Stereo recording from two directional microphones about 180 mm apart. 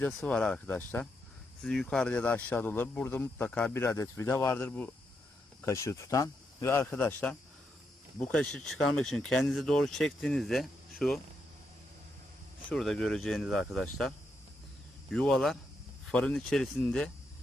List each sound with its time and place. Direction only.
0.0 s speech: 5° left (ahead or behind)
12.6 s speech: 5° left (ahead or behind)
15.1 s speech: centre (ahead or behind)